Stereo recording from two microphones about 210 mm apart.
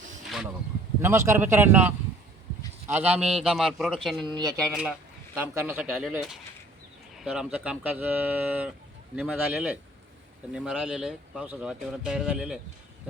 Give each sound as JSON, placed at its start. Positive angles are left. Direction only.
{"t": 0.3, "sound": "a sound", "side_deg": 0}
{"t": 1.0, "sound": "speech", "side_deg": -10}
{"t": 4.3, "sound": "speech", "side_deg": -20}
{"t": 4.6, "sound": "speech", "side_deg": -5}